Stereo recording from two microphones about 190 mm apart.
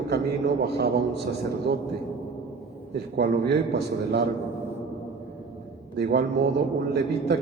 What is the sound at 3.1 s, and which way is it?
Speech, 60° right (ahead or behind).